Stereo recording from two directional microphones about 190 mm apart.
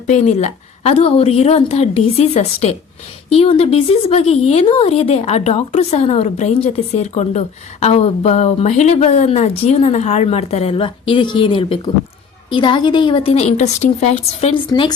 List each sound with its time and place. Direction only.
0.1 s a woman's voice: 35° left (ahead or behind)
14.7 s a woman's voice: 20° left (ahead or behind)